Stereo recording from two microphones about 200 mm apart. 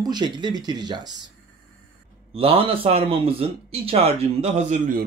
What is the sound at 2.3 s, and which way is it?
Speech, 30° right (ahead or behind).